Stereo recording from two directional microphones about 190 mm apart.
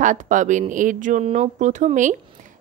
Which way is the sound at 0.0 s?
40° right (ahead or behind).